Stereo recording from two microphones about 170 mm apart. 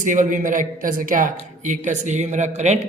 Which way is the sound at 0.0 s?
50° right (ahead or behind).